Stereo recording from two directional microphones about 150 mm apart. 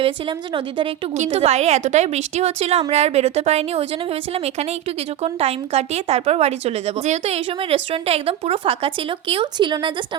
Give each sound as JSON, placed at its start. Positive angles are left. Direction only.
{"t": 0.0, "sound": "speech", "side_deg": -35}
{"t": 1.1, "sound": "a woman's voice", "side_deg": -45}